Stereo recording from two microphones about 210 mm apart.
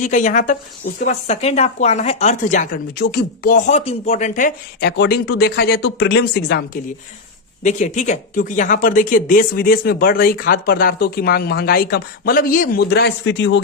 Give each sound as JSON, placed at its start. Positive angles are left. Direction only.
{"t": 0.0, "sound": "speech", "side_deg": 35}
{"t": 7.6, "sound": "speech", "side_deg": 35}